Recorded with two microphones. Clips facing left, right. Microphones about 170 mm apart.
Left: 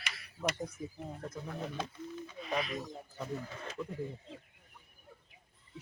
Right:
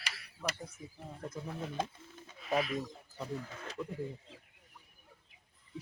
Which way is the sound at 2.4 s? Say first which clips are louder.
Right 3 dB; 5° right (ahead or behind).